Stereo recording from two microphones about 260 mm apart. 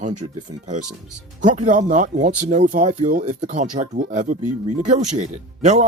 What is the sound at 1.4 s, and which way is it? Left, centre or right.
Speech, right.